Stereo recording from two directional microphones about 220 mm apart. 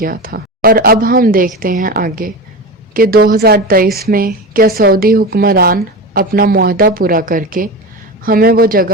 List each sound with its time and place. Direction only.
0.0 s a woman's voice: 40° right (ahead or behind)